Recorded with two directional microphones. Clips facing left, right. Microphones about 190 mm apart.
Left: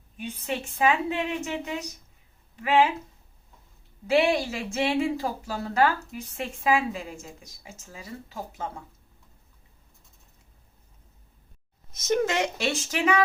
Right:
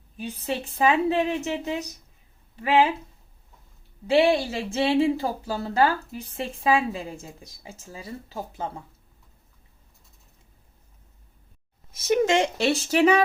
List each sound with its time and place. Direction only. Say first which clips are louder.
0.2 s speech: right 2 dB; 35° right (ahead or behind)
2.6 s speech: right 1 dB; 35° right (ahead or behind)
4.0 s speech: right 3 dB; 30° right (ahead or behind)
12.2 s speech: right 5 dB; 25° right (ahead or behind)